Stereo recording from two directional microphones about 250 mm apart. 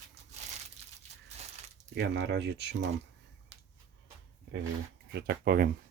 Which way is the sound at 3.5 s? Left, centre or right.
Right.